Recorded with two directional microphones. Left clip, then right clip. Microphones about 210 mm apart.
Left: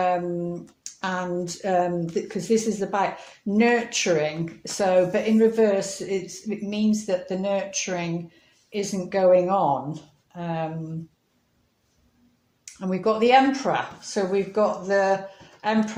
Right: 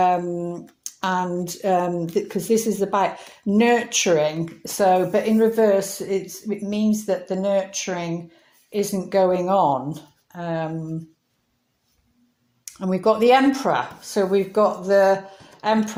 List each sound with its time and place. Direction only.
0.0 s speech: 35° right (ahead or behind)
12.6 s speech: 35° right (ahead or behind)